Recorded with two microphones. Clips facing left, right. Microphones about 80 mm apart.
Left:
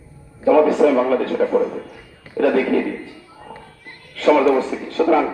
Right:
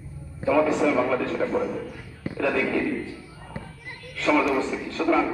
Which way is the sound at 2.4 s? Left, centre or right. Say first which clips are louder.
Left 8 dB; left.